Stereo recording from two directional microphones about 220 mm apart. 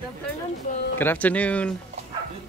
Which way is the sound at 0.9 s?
10° left (ahead or behind).